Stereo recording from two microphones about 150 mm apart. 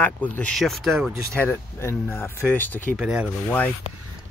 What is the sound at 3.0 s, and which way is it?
Speech, 5° right (ahead or behind).